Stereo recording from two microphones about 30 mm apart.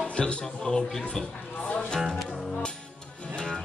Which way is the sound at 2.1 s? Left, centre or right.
Centre.